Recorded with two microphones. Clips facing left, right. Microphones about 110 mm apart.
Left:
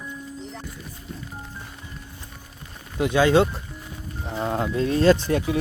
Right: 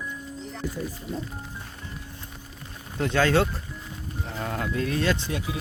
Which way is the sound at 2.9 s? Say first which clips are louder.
Left 4 dB; 15° left (ahead or behind).